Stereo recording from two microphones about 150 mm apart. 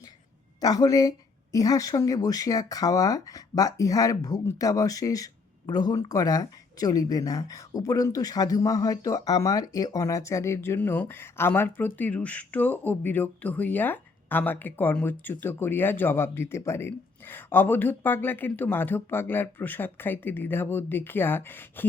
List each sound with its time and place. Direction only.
0.6 s speech: 25° left (ahead or behind)